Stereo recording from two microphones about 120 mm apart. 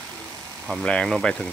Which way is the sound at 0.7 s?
5° left (ahead or behind).